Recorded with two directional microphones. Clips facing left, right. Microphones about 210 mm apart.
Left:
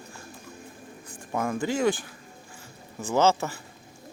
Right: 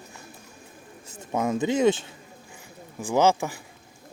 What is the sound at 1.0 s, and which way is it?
Speech, 20° right (ahead or behind).